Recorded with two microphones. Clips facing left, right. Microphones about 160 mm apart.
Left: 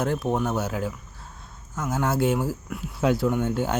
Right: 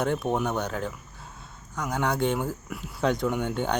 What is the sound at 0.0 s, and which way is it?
Speech, centre (ahead or behind).